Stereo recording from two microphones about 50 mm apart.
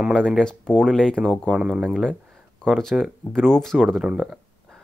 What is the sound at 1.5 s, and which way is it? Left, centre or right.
Speech, centre.